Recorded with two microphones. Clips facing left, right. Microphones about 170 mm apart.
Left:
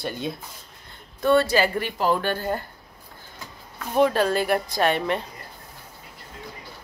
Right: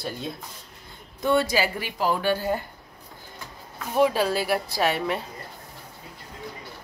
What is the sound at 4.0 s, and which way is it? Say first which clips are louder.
A woman's voice: left 2 dB; 10° right (ahead or behind).